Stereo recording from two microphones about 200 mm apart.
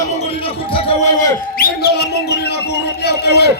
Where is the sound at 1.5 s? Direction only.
50° left (ahead or behind).